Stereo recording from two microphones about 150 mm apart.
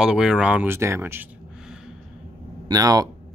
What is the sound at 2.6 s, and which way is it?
Speech, 25° right (ahead or behind).